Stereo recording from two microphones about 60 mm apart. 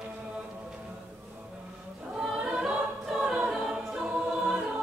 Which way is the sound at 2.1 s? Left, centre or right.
Centre.